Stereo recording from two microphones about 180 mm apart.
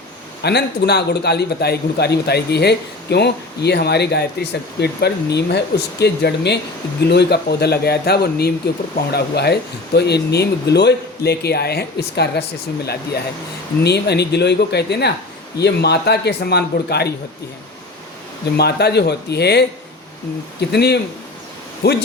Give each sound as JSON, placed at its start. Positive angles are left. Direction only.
{"t": 0.4, "sound": "a man's voice", "side_deg": 65}
{"t": 18.5, "sound": "a man's voice", "side_deg": 65}